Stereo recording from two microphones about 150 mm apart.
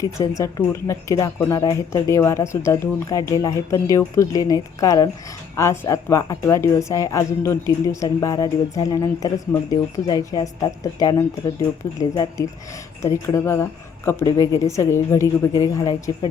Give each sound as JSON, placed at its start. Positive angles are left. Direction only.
{"t": 0.0, "sound": "speech", "side_deg": 20}